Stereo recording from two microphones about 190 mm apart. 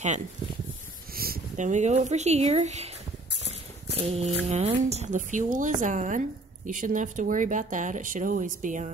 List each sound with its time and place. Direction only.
1.1 s speech: 50° right (ahead or behind); by 2.9 s 35° right (ahead or behind)
4.0 s a woman's voice: 35° right (ahead or behind)